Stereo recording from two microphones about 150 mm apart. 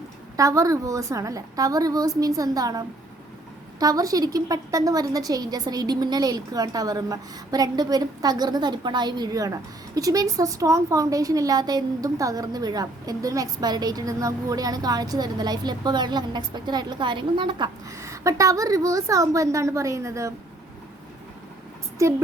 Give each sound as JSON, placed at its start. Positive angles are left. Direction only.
{"t": 0.3, "sound": "a woman's voice", "side_deg": -20}